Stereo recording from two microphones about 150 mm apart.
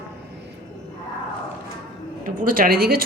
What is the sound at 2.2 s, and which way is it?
Speech, 65° right (ahead or behind).